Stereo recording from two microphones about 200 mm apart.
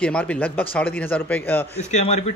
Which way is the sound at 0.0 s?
5° left (ahead or behind).